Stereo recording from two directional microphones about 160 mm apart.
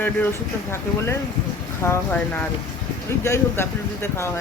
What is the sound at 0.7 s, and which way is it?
Speech, 15° left (ahead or behind).